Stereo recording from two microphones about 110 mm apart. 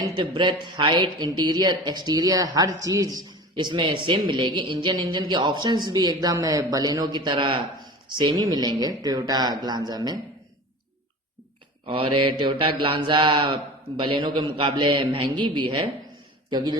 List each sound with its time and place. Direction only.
0.2 s speech: 45° right (ahead or behind)
11.9 s mantra: 50° right (ahead or behind)
16.5 s a man's voice: 40° right (ahead or behind)